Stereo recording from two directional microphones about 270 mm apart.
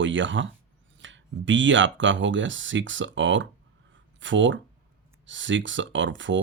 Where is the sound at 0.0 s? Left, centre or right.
Right.